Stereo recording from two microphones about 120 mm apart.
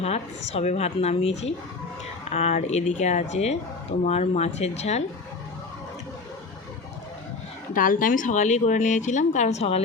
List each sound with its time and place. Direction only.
0.0 s speech: 60° left (ahead or behind)
8.1 s speech: 90° left; by 9.8 s 60° left (ahead or behind)